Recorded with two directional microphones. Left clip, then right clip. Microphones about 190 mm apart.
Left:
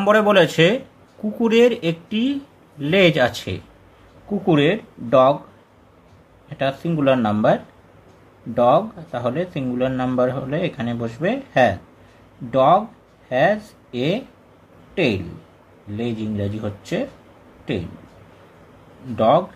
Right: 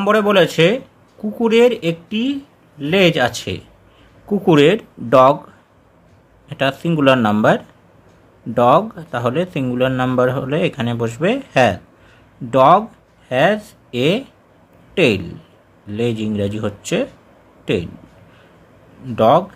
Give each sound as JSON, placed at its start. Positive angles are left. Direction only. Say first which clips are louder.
{"t": 0.0, "sound": "speech", "louder": "right 1 dB", "side_deg": -10}
{"t": 4.5, "sound": "speech", "louder": "right 5 dB", "side_deg": -30}
{"t": 6.5, "sound": "speech", "louder": "right 4 dB", "side_deg": -30}
{"t": 19.1, "sound": "speech", "louder": "right 3 dB", "side_deg": -30}